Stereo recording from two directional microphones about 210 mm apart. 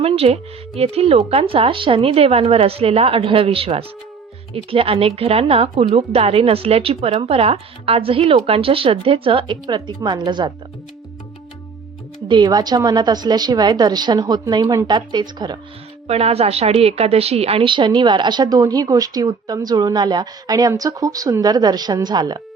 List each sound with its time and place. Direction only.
0.0 s a woman's voice: 30° right (ahead or behind)
12.3 s a woman's voice: 20° right (ahead or behind)